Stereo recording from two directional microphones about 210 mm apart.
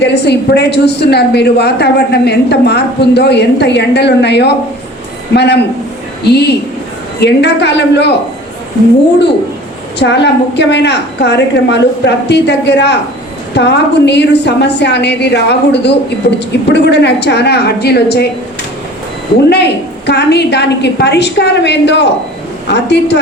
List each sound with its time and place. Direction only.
0.0 s a woman's voice: 55° left (ahead or behind)
10.0 s a woman's voice: 55° left (ahead or behind)
20.1 s a woman's voice: 55° left (ahead or behind)